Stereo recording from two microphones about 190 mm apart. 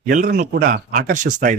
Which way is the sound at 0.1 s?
45° right (ahead or behind).